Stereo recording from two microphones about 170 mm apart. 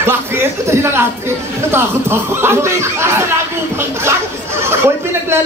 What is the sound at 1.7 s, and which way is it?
A man's voice, 15° right (ahead or behind).